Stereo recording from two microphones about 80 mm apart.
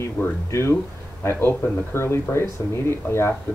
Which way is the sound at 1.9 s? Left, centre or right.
Left.